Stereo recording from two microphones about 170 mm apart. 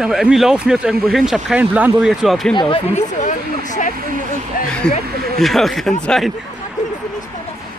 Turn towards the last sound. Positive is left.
turn(degrees=0)  # may be behind; listen again after turning